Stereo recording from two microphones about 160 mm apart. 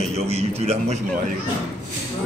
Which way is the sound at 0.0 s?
40° right (ahead or behind).